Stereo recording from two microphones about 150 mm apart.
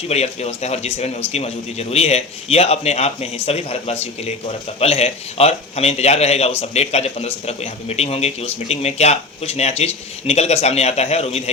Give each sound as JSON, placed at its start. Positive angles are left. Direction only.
{"t": 0.1, "sound": "a man's voice", "side_deg": 45}